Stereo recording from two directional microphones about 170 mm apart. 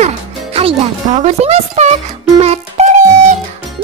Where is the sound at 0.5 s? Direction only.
35° right (ahead or behind).